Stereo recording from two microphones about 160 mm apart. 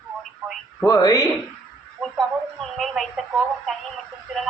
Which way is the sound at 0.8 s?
20° left (ahead or behind).